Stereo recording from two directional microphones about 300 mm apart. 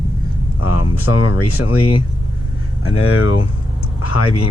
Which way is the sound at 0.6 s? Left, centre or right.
Left.